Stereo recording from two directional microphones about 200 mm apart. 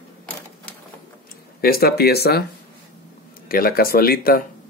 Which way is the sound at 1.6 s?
50° left (ahead or behind).